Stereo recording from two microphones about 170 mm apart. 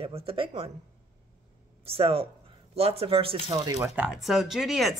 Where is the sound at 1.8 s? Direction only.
35° right (ahead or behind).